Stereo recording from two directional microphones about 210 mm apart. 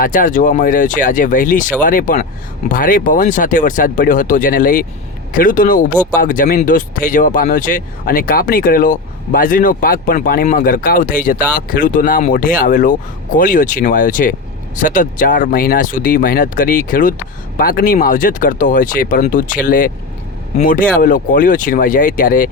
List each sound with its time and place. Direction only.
0.0 s speech: 40° left (ahead or behind)